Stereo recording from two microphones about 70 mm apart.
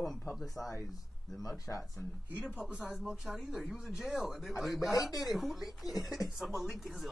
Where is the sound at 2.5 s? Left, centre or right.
Centre.